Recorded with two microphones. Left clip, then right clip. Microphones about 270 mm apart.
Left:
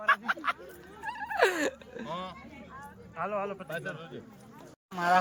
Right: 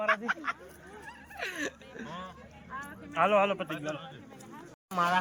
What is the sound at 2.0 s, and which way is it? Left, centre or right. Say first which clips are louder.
Chatter: left 6 dB; left.